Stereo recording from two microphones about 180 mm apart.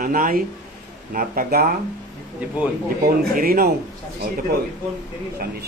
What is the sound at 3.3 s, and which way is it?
Speech, 55° right (ahead or behind).